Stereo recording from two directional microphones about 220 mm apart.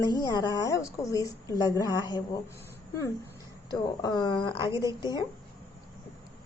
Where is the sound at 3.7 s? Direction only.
20° left (ahead or behind).